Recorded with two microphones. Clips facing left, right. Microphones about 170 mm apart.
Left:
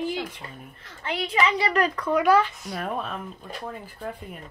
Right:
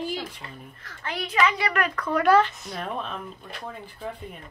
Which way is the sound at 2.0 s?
10° left (ahead or behind).